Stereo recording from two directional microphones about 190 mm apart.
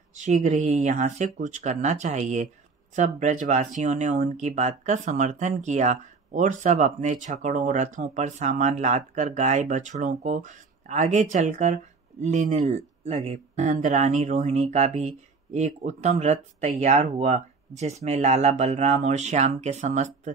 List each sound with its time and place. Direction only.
0.1 s speech: 40° right (ahead or behind)